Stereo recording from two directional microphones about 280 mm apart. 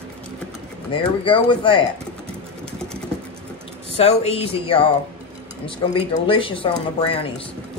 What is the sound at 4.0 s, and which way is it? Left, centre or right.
Speech, left.